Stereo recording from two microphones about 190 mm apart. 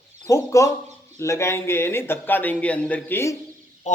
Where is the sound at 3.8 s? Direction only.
40° left (ahead or behind).